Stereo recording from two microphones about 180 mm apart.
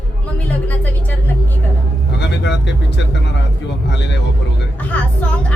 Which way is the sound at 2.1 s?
70° left (ahead or behind).